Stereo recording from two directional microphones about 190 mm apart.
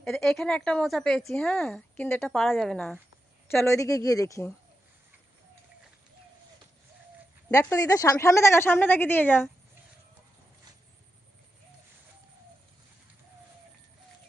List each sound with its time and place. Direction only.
0.0 s speech: centre (ahead or behind)
3.5 s a woman's voice: 15° left (ahead or behind)
7.5 s a woman's voice: 15° left (ahead or behind)